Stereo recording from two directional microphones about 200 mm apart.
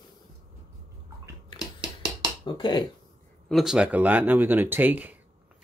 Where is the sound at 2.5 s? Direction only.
25° left (ahead or behind).